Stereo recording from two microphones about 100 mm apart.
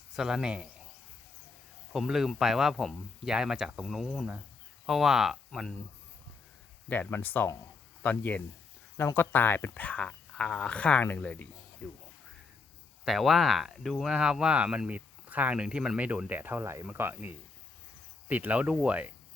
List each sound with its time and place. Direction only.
0.2 s speech: 5° right (ahead or behind)
1.9 s speech: 5° right (ahead or behind)
5.5 s speech: 10° left (ahead or behind)
6.8 s speech: 15° left (ahead or behind)
13.1 s speech: centre (ahead or behind)